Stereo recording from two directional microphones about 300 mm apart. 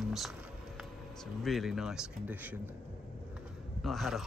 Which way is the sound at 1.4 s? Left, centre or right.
Centre.